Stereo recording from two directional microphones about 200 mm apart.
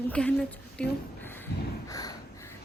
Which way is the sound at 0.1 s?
5° left (ahead or behind).